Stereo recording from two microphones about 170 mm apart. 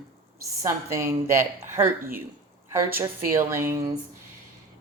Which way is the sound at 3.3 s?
15° right (ahead or behind).